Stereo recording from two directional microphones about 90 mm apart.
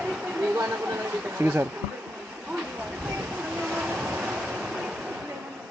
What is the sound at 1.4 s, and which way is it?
Speech, 25° right (ahead or behind).